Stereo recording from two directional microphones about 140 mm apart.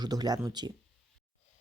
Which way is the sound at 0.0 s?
30° right (ahead or behind).